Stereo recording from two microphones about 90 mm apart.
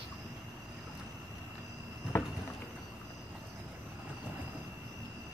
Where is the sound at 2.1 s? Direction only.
25° left (ahead or behind).